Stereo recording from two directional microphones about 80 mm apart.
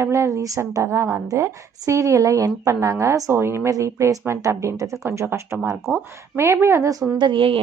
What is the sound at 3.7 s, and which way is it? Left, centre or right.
A woman's voice, right.